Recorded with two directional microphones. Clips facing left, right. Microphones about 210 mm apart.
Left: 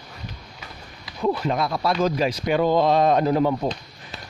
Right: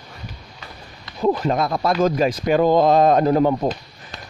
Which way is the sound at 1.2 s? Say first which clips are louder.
Right 3 dB; 40° right (ahead or behind).